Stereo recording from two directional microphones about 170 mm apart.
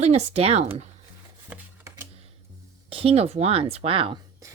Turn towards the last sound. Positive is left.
turn(degrees=-35)  # may be behind; listen again after turning